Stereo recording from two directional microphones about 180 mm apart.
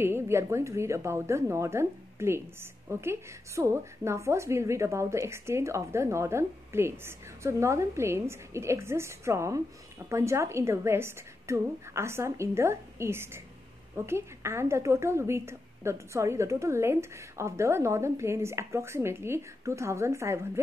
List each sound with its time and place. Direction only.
0.0 s a woman's voice: 15° right (ahead or behind)